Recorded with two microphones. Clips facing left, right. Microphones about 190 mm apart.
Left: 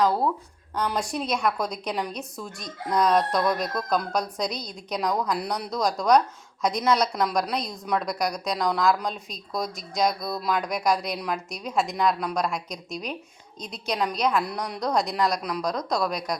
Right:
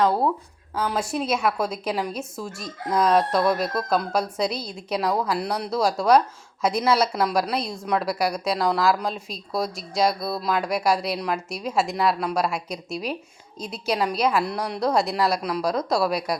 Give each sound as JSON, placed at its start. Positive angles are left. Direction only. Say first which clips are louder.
{"t": 0.8, "sound": "speech", "louder": "right 2 dB", "side_deg": 0}